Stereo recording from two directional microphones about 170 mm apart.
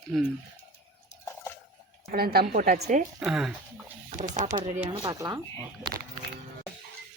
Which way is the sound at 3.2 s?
Centre (ahead or behind).